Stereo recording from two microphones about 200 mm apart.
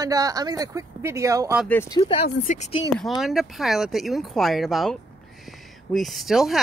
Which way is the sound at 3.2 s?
Centre (ahead or behind).